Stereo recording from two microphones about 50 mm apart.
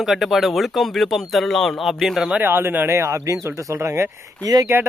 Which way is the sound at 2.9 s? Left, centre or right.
Right.